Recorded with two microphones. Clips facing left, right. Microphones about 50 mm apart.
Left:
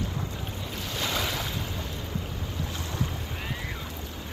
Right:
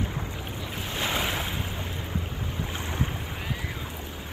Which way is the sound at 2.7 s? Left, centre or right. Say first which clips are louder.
Right 2 dB; right.